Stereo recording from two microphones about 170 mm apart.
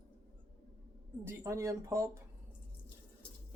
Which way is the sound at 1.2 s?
15° right (ahead or behind).